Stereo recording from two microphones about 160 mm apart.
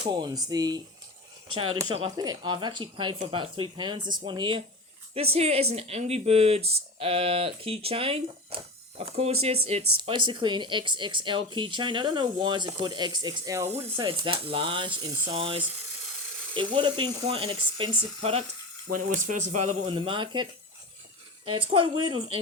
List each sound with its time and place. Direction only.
0.0 s speech: 25° right (ahead or behind)
2.0 s speech: 25° right (ahead or behind)
13.7 s speech: 40° right (ahead or behind)
18.9 s speech: 55° right (ahead or behind); by 22.4 s 35° right (ahead or behind)